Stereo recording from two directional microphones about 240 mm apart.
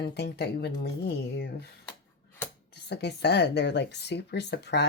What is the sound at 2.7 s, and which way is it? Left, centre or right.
Speech, left.